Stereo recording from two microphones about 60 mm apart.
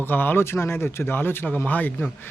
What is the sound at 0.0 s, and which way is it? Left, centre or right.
Speech, left.